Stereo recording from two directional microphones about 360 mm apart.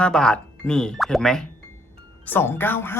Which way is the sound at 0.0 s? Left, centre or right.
Centre.